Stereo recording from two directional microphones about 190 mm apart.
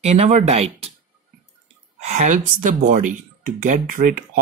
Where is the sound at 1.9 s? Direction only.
40° right (ahead or behind).